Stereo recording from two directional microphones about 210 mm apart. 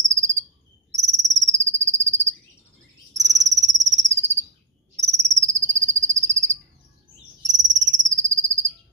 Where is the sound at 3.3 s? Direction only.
35° right (ahead or behind).